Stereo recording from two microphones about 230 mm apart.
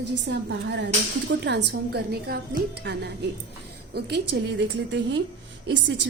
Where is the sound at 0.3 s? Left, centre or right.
Right.